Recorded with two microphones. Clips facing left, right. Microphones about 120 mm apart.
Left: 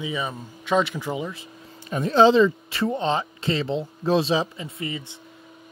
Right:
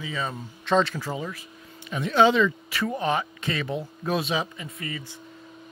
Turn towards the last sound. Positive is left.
turn(degrees=20)  # may be behind; listen again after turning